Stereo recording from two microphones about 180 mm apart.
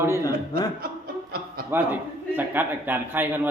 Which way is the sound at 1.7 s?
10° right (ahead or behind).